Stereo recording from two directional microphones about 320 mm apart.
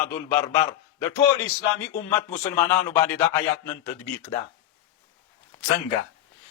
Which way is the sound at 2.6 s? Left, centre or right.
Centre.